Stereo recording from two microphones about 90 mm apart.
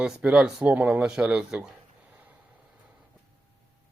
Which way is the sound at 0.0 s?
10° right (ahead or behind).